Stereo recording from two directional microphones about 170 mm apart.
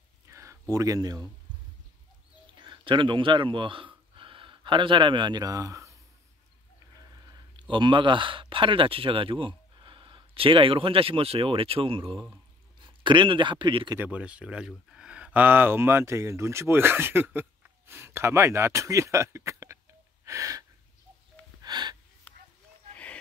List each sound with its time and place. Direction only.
0.3 s a sound: 15° right (ahead or behind)
2.5 s speech: 25° right (ahead or behind)
7.2 s speech: 30° right (ahead or behind)
13.9 s speech: 10° right (ahead or behind)
20.2 s gasp: 20° right (ahead or behind)
21.6 s wheeze: 25° right (ahead or behind)
22.3 s a sound: 10° left (ahead or behind)